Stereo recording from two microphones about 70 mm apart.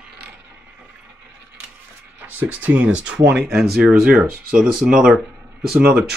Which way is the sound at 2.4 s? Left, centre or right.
Right.